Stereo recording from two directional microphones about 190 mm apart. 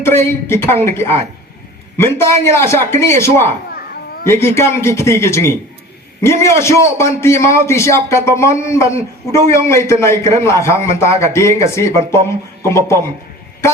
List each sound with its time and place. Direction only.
0.0 s a man's voice: 10° left (ahead or behind)